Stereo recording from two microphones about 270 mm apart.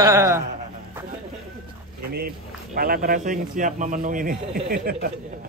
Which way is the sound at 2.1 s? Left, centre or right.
Right.